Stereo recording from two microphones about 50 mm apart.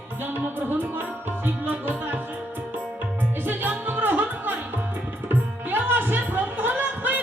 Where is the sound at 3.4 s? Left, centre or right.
Right.